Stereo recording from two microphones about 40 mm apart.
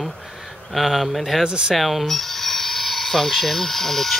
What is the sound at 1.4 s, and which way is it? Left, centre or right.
Speech, right.